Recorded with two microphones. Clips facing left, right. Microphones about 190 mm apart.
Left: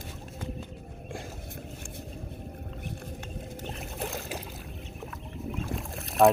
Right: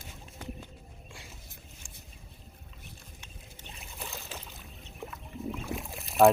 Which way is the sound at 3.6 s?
55° left (ahead or behind).